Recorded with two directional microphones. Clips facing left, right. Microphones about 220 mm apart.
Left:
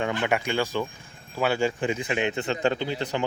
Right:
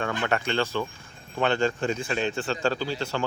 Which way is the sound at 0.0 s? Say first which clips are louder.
Left 2 dB; 15° left (ahead or behind).